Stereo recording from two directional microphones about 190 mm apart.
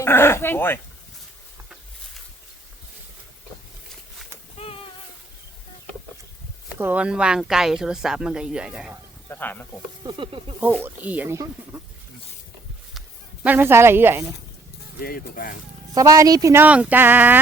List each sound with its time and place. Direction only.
0.0 s speech: 15° left (ahead or behind)
4.5 s a sound: 30° left (ahead or behind)
6.7 s speech: 10° right (ahead or behind)
9.3 s speech: 10° left (ahead or behind)
10.0 s speech: 25° right (ahead or behind)
10.8 s speech: 10° right (ahead or behind)
13.4 s speech: 10° right (ahead or behind)
15.0 s speech: 50° left (ahead or behind)
16.0 s speech: 20° right (ahead or behind)